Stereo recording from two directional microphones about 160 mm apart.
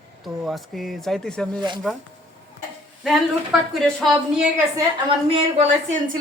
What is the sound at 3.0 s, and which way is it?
A man's voice, centre (ahead or behind).